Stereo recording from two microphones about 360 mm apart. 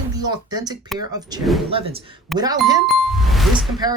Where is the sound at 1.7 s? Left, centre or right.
Centre.